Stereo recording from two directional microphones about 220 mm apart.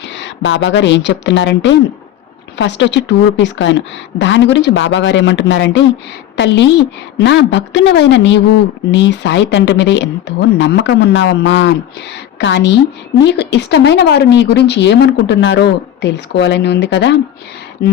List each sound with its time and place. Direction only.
0.2 s a woman's voice: 55° left (ahead or behind)